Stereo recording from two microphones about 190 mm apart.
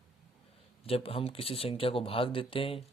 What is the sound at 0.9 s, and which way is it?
Speech, 30° left (ahead or behind).